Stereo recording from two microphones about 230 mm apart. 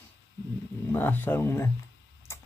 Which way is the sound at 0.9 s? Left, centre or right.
Centre.